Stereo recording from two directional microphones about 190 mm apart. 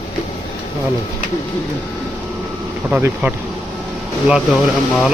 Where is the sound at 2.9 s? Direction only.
5° right (ahead or behind).